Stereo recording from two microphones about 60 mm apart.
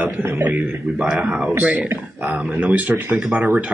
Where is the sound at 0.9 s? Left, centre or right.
Right.